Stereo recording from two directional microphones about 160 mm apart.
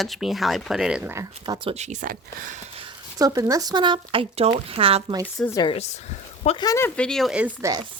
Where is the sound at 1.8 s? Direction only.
50° right (ahead or behind).